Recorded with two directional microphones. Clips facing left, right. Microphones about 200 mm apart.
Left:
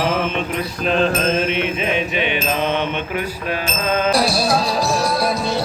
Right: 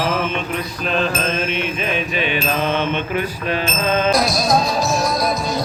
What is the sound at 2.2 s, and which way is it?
Mantra, 20° left (ahead or behind).